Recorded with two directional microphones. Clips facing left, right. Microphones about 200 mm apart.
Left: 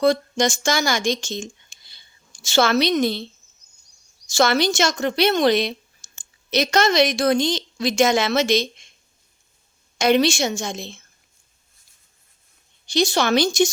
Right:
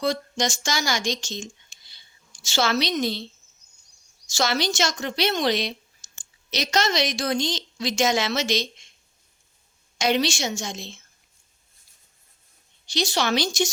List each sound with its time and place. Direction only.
0.0 s speech: 55° left (ahead or behind)
4.3 s speech: 55° left (ahead or behind)
10.0 s a woman's voice: 55° left (ahead or behind)
12.9 s speech: 50° left (ahead or behind)